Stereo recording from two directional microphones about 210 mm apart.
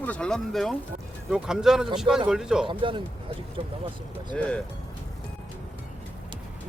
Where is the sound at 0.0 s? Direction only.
5° left (ahead or behind).